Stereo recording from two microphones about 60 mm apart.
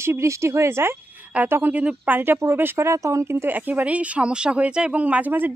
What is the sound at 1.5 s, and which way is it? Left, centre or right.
Speech, right.